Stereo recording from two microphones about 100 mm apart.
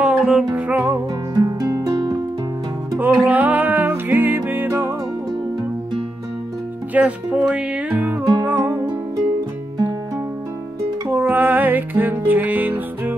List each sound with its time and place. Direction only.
0.0 s music: 10° right (ahead or behind)
0.7 s music: 15° right (ahead or behind)
1.3 s music: 35° right (ahead or behind)
3.0 s music: 15° right (ahead or behind)
6.9 s speech: 15° right (ahead or behind)
8.5 s music: 20° right (ahead or behind)
11.1 s music: 20° right (ahead or behind)